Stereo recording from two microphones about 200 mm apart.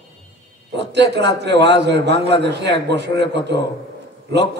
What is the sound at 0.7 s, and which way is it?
A man's voice, 60° right (ahead or behind).